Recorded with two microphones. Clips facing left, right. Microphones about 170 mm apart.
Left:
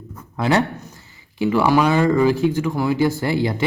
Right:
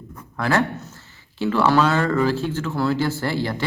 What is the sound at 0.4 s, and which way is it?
Speech, 15° left (ahead or behind).